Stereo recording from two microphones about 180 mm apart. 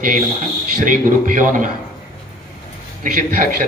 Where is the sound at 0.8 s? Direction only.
45° right (ahead or behind).